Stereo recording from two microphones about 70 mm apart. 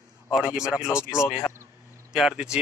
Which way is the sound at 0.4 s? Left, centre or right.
Centre.